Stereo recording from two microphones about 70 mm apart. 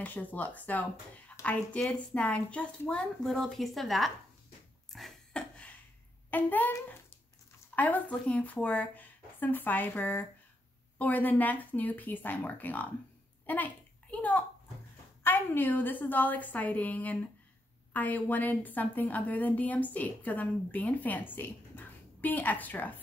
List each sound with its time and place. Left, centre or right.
0.0 s a woman's voice: left
3.3 s a woman's voice: centre
5.3 s a sound: centre
6.3 s a woman's voice: left